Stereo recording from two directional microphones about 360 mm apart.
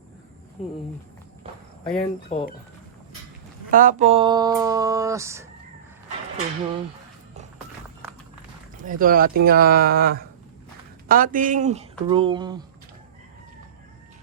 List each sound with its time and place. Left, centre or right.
2.0 s speech: centre
3.7 s speech: right
8.8 s speech: right